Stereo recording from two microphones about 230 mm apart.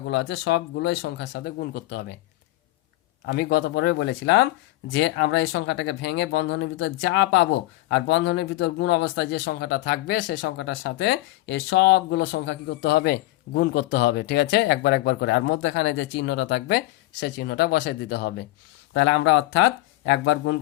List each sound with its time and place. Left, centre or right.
0.1 s speech: left
3.2 s speech: left